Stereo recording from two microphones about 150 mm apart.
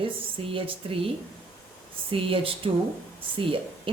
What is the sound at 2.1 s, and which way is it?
Speech, 35° right (ahead or behind).